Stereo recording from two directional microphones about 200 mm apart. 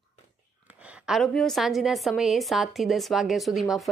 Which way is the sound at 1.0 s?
Centre (ahead or behind).